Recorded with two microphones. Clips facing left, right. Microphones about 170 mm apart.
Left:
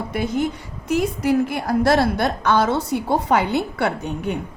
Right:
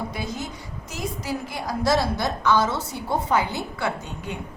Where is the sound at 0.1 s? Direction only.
55° left (ahead or behind).